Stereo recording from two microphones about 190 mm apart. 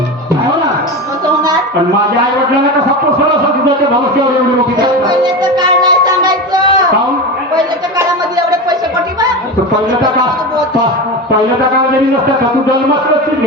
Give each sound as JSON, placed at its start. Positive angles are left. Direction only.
{"t": 5.0, "sound": "music", "side_deg": -20}